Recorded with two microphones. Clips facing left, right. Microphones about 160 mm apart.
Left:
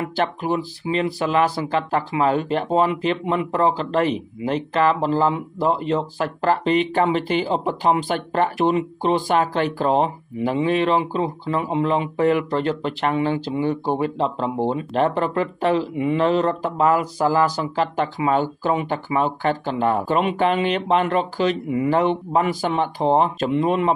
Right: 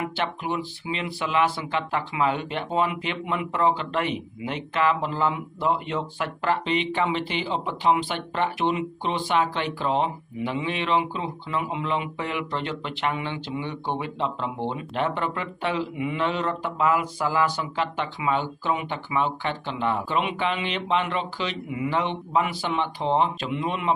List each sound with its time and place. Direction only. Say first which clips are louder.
0.0 s speech: left 5 dB; 40° left (ahead or behind)